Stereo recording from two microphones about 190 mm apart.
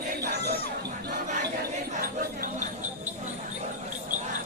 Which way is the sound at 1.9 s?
45° right (ahead or behind).